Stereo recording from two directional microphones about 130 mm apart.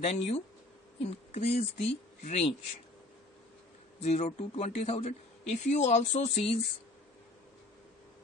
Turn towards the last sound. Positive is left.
turn(degrees=55)  # may be behind; listen again after turning